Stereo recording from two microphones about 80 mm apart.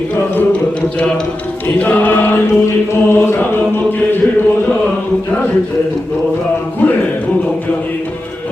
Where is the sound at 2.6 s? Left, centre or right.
Left.